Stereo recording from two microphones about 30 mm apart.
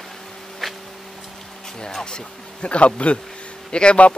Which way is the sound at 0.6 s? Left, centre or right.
Centre.